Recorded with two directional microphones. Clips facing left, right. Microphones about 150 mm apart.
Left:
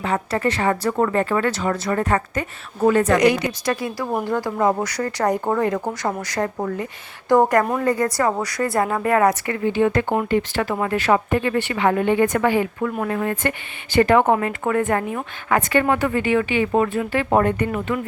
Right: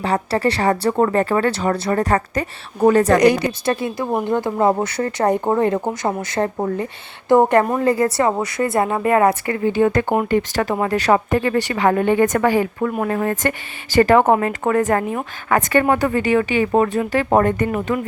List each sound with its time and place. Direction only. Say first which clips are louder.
0.0 s speech: right 3 dB; 35° right (ahead or behind)